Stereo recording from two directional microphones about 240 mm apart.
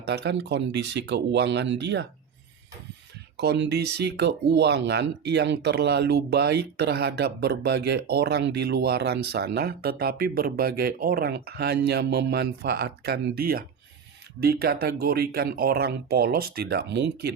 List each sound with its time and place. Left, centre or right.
0.0 s speech: right
3.3 s speech: right